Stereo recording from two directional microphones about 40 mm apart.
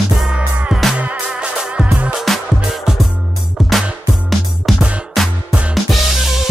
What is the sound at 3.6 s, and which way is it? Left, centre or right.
Music, centre.